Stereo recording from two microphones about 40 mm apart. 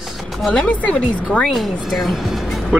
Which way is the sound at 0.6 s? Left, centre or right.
Left.